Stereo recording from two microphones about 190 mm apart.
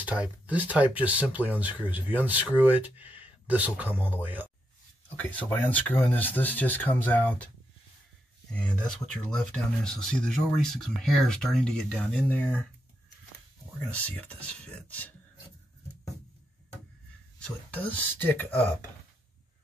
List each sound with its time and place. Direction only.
0.0 s speech: 5° right (ahead or behind)
5.2 s speech: 10° left (ahead or behind)
8.5 s speech: 5° left (ahead or behind)
13.8 s speech: 10° left (ahead or behind)
17.7 s speech: 10° left (ahead or behind)